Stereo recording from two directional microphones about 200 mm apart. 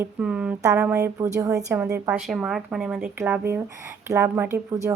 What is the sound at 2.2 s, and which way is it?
Speech, centre (ahead or behind).